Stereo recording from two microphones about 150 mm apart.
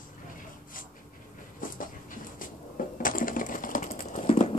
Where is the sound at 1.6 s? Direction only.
65° left (ahead or behind).